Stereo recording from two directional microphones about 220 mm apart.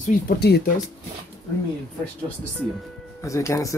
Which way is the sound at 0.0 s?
50° left (ahead or behind).